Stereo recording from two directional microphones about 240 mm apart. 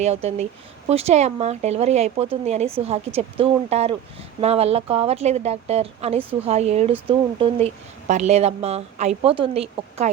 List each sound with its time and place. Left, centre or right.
0.0 s speech: right